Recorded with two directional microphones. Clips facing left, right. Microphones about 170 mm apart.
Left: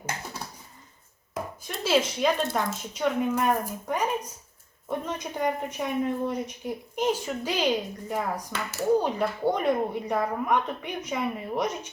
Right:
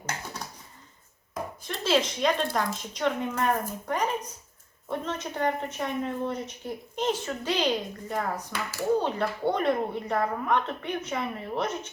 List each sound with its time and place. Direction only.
1.3 s speech: 10° left (ahead or behind)
8.5 s speech: 25° left (ahead or behind)
9.0 s speech: 10° left (ahead or behind)